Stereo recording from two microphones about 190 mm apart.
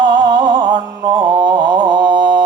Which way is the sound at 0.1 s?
25° right (ahead or behind).